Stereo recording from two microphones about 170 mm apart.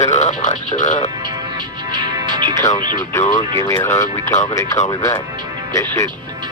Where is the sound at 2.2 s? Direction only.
25° right (ahead or behind).